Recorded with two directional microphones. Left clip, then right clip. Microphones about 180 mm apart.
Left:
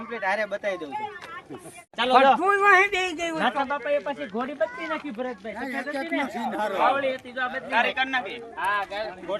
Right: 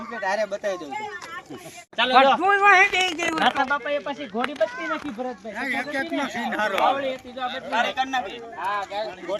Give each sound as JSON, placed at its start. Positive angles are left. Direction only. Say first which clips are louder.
{"t": 0.2, "sound": "speech", "louder": "right 2 dB", "side_deg": -5}
{"t": 2.0, "sound": "a man's voice", "louder": "right 1 dB", "side_deg": 90}
{"t": 3.4, "sound": "speech", "louder": "right 3 dB", "side_deg": 35}
{"t": 5.5, "sound": "speech", "louder": "right 6 dB", "side_deg": -20}
{"t": 6.8, "sound": "speech", "louder": "even", "side_deg": 0}
{"t": 7.7, "sound": "speech", "louder": "even", "side_deg": 10}
{"t": 8.5, "sound": "speech", "louder": "left 1 dB", "side_deg": -5}